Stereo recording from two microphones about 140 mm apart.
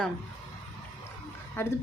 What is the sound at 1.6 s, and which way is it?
Speech, 15° left (ahead or behind).